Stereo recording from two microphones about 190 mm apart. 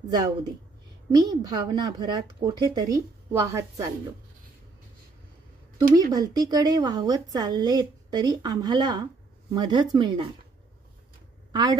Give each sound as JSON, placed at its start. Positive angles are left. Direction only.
{"t": 0.1, "sound": "a woman's voice", "side_deg": -25}
{"t": 6.1, "sound": "a woman's voice", "side_deg": -20}